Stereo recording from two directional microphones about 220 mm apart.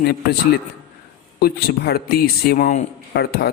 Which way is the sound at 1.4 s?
45° left (ahead or behind).